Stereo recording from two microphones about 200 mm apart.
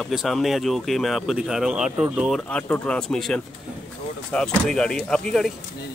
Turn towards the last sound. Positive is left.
turn(degrees=0)  # may be behind; listen again after turning